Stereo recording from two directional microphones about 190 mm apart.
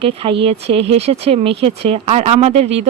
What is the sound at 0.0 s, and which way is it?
Speech, 30° right (ahead or behind).